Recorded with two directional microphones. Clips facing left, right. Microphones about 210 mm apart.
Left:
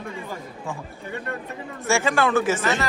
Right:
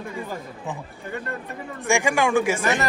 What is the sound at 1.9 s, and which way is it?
Speech, 15° right (ahead or behind).